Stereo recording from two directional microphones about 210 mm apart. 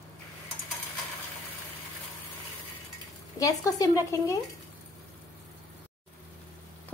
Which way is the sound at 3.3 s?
15° left (ahead or behind).